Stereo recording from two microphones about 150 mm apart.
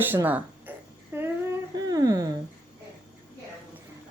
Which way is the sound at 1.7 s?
25° right (ahead or behind).